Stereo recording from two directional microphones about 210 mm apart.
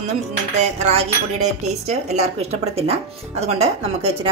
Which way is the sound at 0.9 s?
30° right (ahead or behind).